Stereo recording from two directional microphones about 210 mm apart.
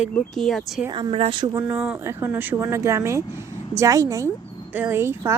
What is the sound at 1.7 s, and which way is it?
Speech, 5° right (ahead or behind).